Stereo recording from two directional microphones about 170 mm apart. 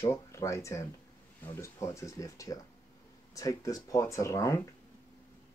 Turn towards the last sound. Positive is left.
turn(degrees=20)  # may be behind; listen again after turning